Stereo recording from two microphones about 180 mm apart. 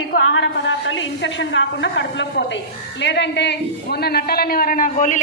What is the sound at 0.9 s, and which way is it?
A woman's voice, 90° left.